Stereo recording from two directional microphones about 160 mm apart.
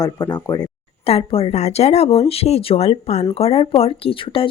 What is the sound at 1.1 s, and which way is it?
Speech, 35° left (ahead or behind).